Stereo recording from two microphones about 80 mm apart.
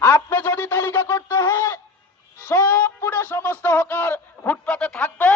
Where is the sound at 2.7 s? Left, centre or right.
Left.